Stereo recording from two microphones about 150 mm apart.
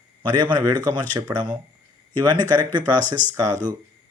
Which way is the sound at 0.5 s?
30° right (ahead or behind).